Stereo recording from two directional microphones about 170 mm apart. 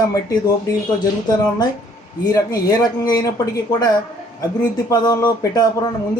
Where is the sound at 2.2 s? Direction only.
20° left (ahead or behind).